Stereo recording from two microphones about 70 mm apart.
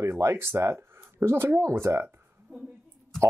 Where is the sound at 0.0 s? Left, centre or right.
Right.